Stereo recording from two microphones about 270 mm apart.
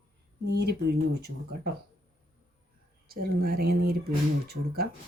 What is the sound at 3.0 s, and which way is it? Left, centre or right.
Speech, right.